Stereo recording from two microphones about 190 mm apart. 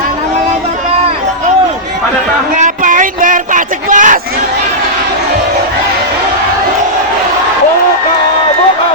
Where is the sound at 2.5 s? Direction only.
45° right (ahead or behind).